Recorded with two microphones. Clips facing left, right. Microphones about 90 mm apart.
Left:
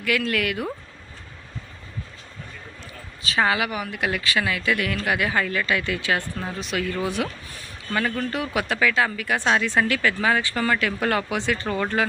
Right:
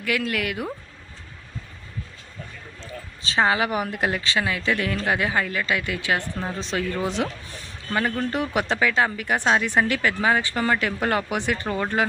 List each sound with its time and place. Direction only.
0.2 s speech: 20° right (ahead or behind)
3.2 s speech: 25° right (ahead or behind)
3.7 s speech: 45° right (ahead or behind)
4.1 s speech: 25° right (ahead or behind)